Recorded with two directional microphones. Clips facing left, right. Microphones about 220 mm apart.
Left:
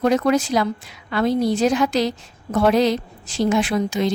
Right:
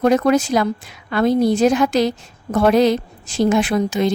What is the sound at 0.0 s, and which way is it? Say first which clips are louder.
A woman's voice: right 3 dB; 50° right (ahead or behind).